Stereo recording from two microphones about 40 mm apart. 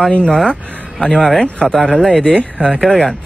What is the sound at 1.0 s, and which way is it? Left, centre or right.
Speech, centre.